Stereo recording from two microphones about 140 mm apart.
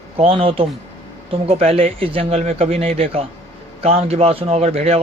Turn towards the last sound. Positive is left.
turn(degrees=-50)  # may be behind; listen again after turning